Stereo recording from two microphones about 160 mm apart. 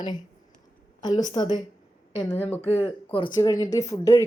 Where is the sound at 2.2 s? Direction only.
10° left (ahead or behind).